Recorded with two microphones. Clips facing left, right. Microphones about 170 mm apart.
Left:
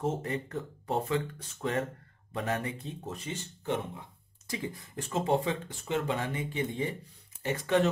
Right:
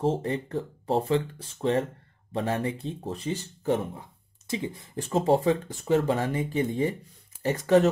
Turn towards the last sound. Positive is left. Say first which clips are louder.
# right 6 dB
turn(degrees=-40)  # may be behind; listen again after turning